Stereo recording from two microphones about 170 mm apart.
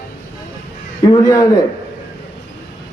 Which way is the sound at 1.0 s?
20° left (ahead or behind).